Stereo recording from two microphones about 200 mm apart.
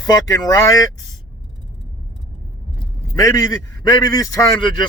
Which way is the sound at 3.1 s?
15° left (ahead or behind).